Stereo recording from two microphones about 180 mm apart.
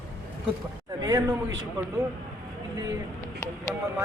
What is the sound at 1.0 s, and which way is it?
Speech, 20° right (ahead or behind).